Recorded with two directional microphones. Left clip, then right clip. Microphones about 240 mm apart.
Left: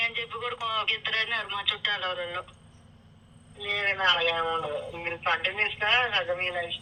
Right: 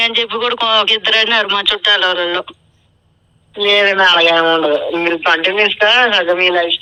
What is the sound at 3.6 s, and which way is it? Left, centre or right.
Speech, right.